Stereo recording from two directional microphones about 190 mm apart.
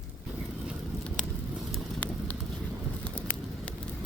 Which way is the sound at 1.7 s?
10° left (ahead or behind).